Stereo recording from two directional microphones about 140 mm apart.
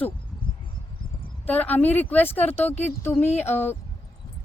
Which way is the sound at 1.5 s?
10° left (ahead or behind).